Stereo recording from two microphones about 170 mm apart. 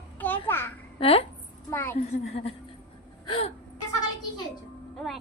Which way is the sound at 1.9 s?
35° left (ahead or behind).